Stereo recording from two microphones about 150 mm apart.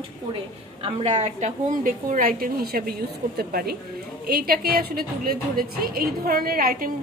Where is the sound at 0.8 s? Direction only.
45° right (ahead or behind).